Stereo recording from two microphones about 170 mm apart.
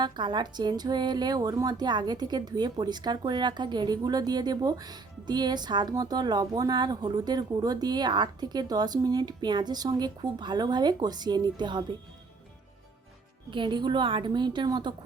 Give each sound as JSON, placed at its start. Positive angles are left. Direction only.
{"t": 0.0, "sound": "speech", "side_deg": -25}
{"t": 13.5, "sound": "speech", "side_deg": -30}